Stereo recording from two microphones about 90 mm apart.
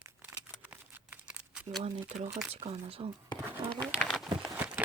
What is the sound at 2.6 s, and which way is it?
Speech, 90° right.